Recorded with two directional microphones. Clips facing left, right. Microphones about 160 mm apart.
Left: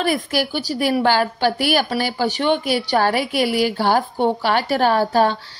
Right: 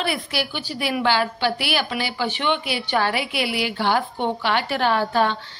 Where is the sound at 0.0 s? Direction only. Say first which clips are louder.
Left 5 dB; 45° left (ahead or behind).